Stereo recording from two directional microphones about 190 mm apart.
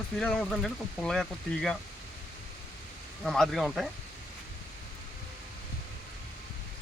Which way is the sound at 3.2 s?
Centre (ahead or behind).